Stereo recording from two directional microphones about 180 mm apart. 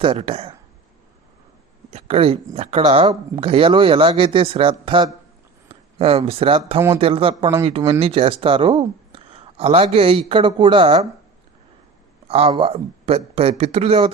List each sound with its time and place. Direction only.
0.0 s speech: 30° right (ahead or behind)
1.9 s speech: 35° right (ahead or behind)
12.5 s speech: 30° right (ahead or behind)